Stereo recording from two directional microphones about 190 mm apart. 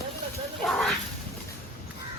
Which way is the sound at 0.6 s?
Centre (ahead or behind).